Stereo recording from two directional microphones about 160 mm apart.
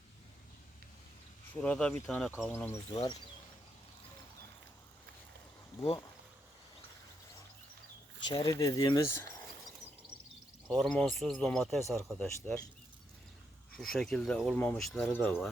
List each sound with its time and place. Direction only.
1.6 s speech: 5° left (ahead or behind)
2.9 s speech: 25° left (ahead or behind)
8.3 s speech: 25° left (ahead or behind)
10.7 s speech: 5° left (ahead or behind)
13.7 s speech: centre (ahead or behind)